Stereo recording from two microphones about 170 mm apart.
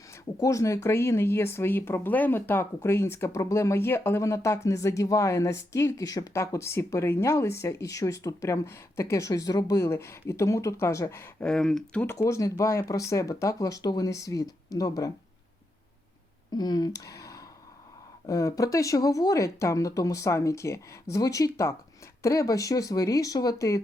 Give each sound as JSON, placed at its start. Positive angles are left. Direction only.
{"t": 0.3, "sound": "speech", "side_deg": 20}
{"t": 12.0, "sound": "speech", "side_deg": 15}
{"t": 16.5, "sound": "speech", "side_deg": 25}
{"t": 17.0, "sound": "a sound", "side_deg": 20}
{"t": 18.3, "sound": "speech", "side_deg": 20}